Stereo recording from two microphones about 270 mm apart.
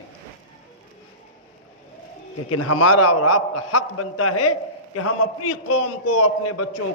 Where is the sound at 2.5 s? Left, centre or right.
Left.